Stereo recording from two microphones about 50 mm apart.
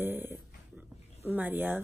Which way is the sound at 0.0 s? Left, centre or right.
Right.